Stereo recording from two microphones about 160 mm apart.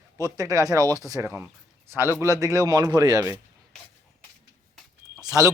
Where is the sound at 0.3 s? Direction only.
20° right (ahead or behind).